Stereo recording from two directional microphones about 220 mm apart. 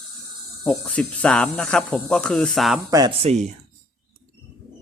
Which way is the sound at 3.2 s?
30° right (ahead or behind).